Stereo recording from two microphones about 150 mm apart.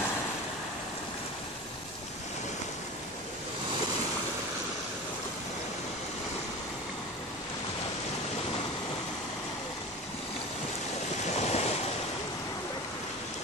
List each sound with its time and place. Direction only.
11.2 s waves: 45° left (ahead or behind)